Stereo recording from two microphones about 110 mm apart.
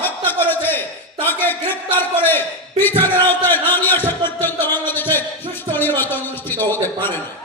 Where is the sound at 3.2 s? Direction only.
20° left (ahead or behind).